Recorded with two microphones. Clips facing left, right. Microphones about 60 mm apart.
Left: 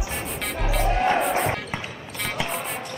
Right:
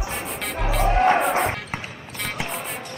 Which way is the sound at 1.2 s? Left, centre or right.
Centre.